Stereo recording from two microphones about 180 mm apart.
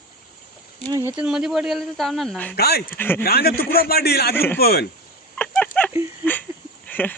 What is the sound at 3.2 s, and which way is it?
A man's voice, 60° left (ahead or behind).